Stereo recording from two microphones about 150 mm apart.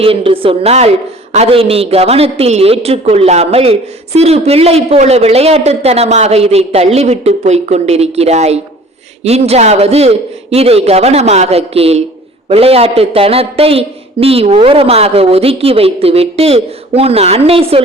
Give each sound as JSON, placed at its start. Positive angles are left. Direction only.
{"t": 0.0, "sound": "a man's voice", "side_deg": -40}